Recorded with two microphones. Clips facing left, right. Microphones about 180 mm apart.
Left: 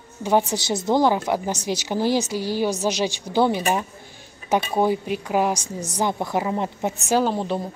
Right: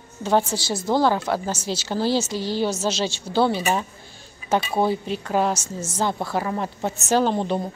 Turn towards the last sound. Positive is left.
turn(degrees=5)  # may be behind; listen again after turning